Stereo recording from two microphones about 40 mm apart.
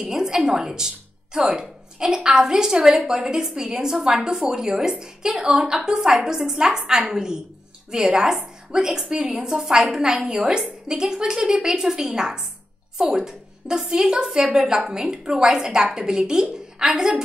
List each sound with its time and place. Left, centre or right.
0.0 s a woman's voice: centre